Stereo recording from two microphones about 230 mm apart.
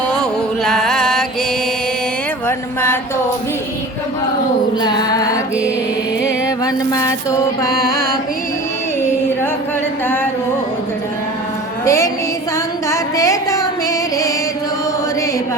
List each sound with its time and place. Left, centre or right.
0.1 s music: centre
2.5 s mantra: centre
4.8 s mantra: centre
6.7 s mantra: centre
11.9 s mantra: centre
12.9 s a sound: centre